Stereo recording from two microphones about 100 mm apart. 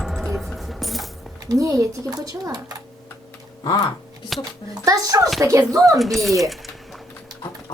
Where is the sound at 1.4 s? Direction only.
35° right (ahead or behind).